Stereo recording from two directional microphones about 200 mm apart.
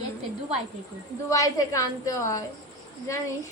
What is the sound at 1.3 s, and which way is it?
A woman's voice, 15° left (ahead or behind).